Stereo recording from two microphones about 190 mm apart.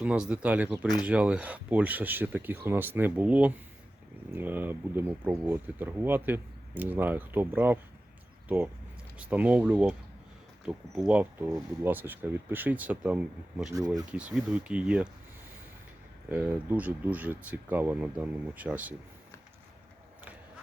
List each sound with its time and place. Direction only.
0.0 s speech: 5° right (ahead or behind)
13.7 s speech: 20° right (ahead or behind)
14.1 s speech: 5° right (ahead or behind)
16.3 s speech: 10° right (ahead or behind)